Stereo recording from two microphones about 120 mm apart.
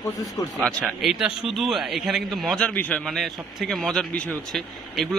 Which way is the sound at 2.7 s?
15° left (ahead or behind).